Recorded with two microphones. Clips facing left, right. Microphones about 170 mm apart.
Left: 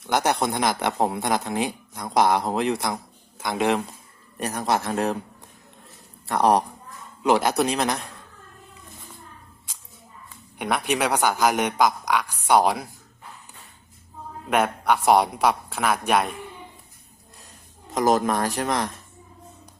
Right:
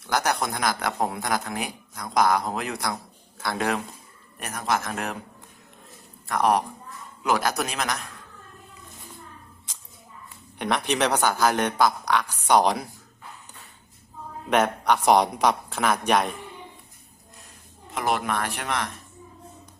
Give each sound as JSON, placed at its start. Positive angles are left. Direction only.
{"t": 0.1, "sound": "speech", "side_deg": 25}
{"t": 2.9, "sound": "a man's voice", "side_deg": 15}
{"t": 4.4, "sound": "speech", "side_deg": 35}
{"t": 6.2, "sound": "speech", "side_deg": 30}
{"t": 10.6, "sound": "a man's voice", "side_deg": 10}
{"t": 14.5, "sound": "a man's voice", "side_deg": 5}
{"t": 17.9, "sound": "speech", "side_deg": 40}